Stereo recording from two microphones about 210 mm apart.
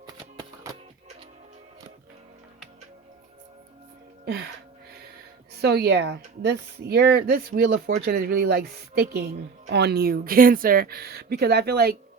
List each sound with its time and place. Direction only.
0.0 s music: 20° right (ahead or behind)
4.3 s music: 50° right (ahead or behind)
5.5 s speech: 50° right (ahead or behind)